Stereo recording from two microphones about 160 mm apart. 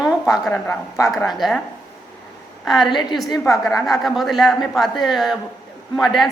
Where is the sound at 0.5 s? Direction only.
15° left (ahead or behind).